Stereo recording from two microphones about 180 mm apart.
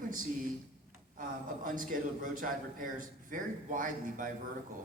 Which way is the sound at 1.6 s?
50° right (ahead or behind).